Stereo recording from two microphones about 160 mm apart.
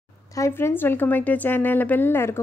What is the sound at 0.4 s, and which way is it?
A woman's voice, 15° left (ahead or behind).